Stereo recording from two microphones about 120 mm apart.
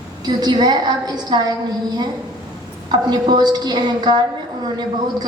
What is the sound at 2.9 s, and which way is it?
A woman's voice, 35° right (ahead or behind).